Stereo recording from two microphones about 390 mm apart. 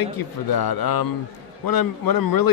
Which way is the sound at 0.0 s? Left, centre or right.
Left.